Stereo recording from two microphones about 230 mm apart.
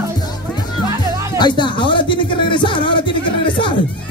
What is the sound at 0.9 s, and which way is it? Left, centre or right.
Music, centre.